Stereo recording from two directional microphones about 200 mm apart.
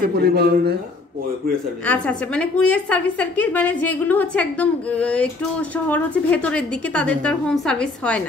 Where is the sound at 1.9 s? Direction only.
5° left (ahead or behind).